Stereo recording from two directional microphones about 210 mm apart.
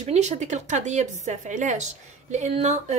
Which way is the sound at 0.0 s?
30° right (ahead or behind).